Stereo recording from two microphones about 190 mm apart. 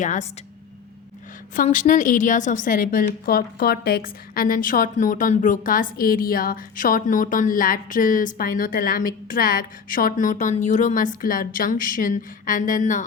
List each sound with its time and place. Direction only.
0.0 s a woman's voice: 40° left (ahead or behind)
1.5 s a woman's voice: 40° left (ahead or behind)